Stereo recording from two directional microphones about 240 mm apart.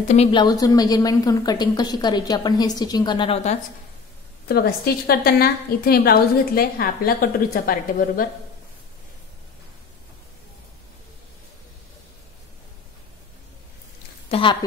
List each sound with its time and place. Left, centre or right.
0.1 s a woman's voice: left
4.5 s a woman's voice: left
14.3 s a woman's voice: left